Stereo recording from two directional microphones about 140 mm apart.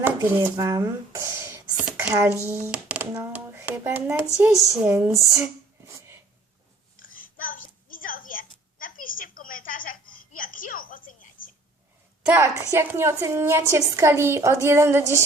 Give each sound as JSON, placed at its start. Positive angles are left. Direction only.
{"t": 0.3, "sound": "speech", "side_deg": -30}
{"t": 7.3, "sound": "a sound", "side_deg": 75}
{"t": 12.2, "sound": "a woman's voice", "side_deg": -15}